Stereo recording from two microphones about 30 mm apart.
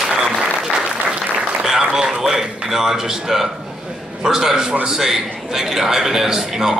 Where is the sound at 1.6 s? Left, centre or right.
Centre.